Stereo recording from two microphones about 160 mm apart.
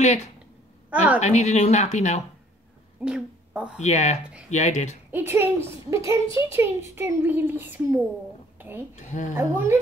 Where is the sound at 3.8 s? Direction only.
45° left (ahead or behind).